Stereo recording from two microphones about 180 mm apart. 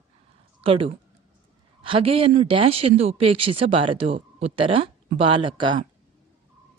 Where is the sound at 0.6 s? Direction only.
30° right (ahead or behind).